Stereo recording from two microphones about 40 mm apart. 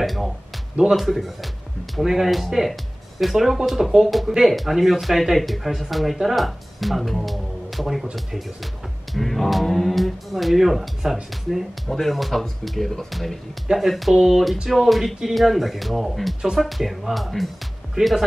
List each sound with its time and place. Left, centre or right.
0.0 s speech: centre
9.1 s speech: centre
18.0 s speech: right